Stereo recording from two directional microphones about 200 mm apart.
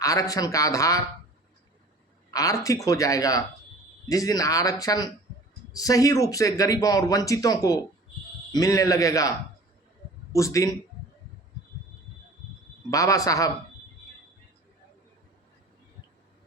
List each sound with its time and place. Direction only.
0.0 s speech: 15° left (ahead or behind)
2.3 s speech: 15° left (ahead or behind)
10.3 s speech: 15° left (ahead or behind)
12.9 s speech: 15° left (ahead or behind)